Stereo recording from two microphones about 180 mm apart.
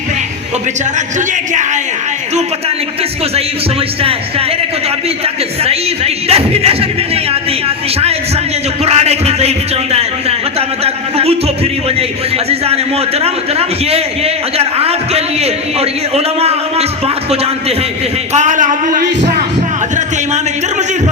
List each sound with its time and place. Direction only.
0.9 s a man's voice: 40° right (ahead or behind)
5.0 s a man's voice: 35° right (ahead or behind)
8.8 s a man's voice: 35° right (ahead or behind)